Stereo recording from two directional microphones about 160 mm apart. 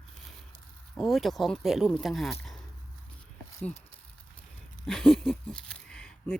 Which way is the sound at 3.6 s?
15° left (ahead or behind).